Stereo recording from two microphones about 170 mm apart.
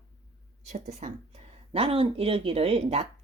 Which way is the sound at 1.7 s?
35° right (ahead or behind).